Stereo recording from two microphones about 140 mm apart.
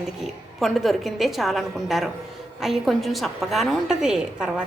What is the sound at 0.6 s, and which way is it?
A woman's voice, centre (ahead or behind).